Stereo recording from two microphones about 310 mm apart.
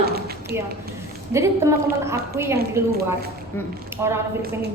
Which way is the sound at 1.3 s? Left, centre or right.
Centre.